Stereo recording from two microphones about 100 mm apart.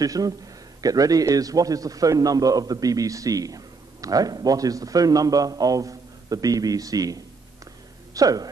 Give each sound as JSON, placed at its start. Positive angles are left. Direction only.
{"t": 0.0, "sound": "a man's voice", "side_deg": -35}